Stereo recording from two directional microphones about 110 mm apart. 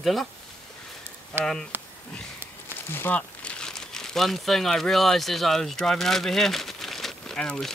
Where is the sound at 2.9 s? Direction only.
20° left (ahead or behind).